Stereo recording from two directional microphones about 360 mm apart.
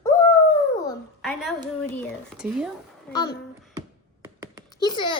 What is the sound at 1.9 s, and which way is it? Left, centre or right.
A child's voice, centre.